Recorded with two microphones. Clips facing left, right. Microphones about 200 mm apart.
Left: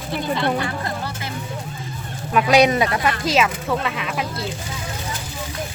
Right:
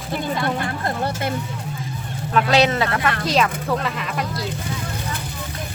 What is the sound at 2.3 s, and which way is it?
Speech, 15° left (ahead or behind).